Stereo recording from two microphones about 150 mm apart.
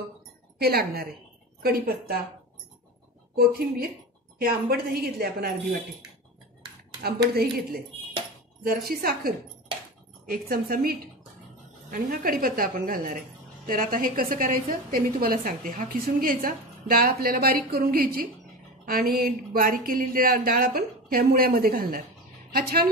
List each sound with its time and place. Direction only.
0.6 s a woman's voice: 90° right
3.3 s a woman's voice: 90° right
4.4 s speech: 80° right
5.2 s a woman's voice: 90° right
8.6 s speech: 80° right
10.3 s a woman's voice: 75° right (ahead or behind)